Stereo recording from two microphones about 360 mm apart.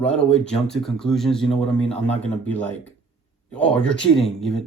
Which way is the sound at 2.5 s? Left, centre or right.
Centre.